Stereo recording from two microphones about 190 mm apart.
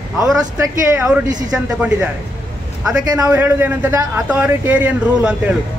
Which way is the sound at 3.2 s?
10° right (ahead or behind).